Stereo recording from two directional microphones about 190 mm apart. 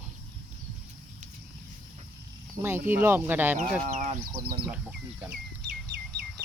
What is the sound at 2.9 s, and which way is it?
Speech, 10° right (ahead or behind).